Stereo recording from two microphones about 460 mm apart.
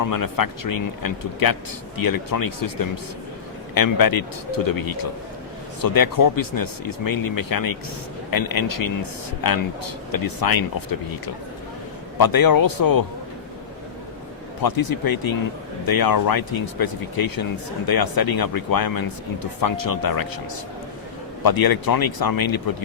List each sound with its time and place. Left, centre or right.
0.0 s speech: left
12.1 s speech: left
14.6 s speech: left
21.4 s speech: left